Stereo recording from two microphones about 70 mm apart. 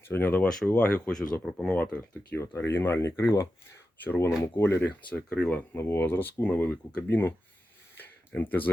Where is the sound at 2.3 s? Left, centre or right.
Left.